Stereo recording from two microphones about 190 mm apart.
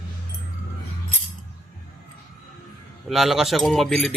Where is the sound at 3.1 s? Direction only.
Centre (ahead or behind).